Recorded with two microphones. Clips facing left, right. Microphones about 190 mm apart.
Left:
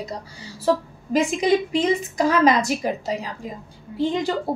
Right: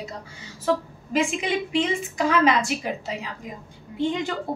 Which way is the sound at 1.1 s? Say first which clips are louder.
Left 5 dB; 40° left (ahead or behind).